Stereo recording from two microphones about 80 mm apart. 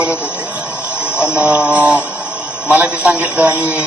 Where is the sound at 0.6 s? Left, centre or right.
Left.